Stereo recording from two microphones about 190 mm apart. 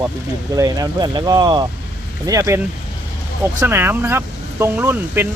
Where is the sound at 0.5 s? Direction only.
20° right (ahead or behind).